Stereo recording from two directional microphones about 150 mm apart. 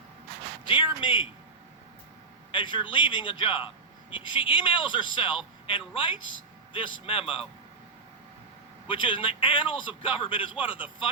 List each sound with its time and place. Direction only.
0.7 s a man's voice: 35° left (ahead or behind)
2.5 s a man's voice: 35° left (ahead or behind)
8.9 s a man's voice: 35° left (ahead or behind)